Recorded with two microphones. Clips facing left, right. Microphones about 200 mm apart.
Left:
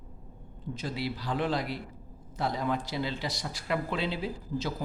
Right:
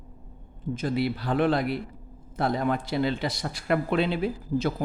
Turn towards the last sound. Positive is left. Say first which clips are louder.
# right 7 dB
turn(degrees=-55)  # may be behind; listen again after turning